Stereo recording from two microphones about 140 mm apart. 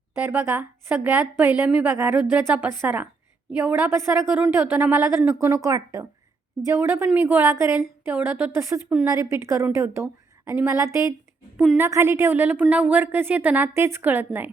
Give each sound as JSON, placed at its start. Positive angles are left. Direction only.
{"t": 0.3, "sound": "a woman's voice", "side_deg": -15}